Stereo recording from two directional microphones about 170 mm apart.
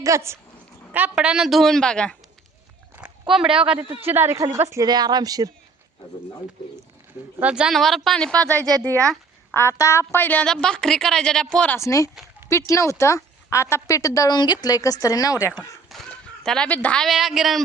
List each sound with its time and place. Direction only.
0.0 s a woman's voice: 15° right (ahead or behind); by 2.1 s 5° left (ahead or behind)
2.9 s a sound: 5° right (ahead or behind)
3.7 s speech: 35° right (ahead or behind)
4.1 s a woman's voice: 15° right (ahead or behind)
7.3 s a woman's voice: 5° right (ahead or behind); by 15.5 s 20° left (ahead or behind)
15.9 s speech: centre (ahead or behind)